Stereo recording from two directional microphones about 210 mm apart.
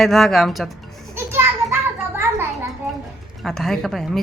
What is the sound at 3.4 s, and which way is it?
Speech, centre (ahead or behind).